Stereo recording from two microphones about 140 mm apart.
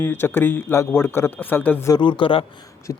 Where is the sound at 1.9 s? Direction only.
35° left (ahead or behind).